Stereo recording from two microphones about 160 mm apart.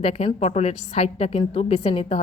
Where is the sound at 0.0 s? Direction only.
40° left (ahead or behind).